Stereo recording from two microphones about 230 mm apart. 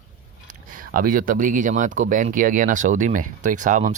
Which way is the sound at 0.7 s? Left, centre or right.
Right.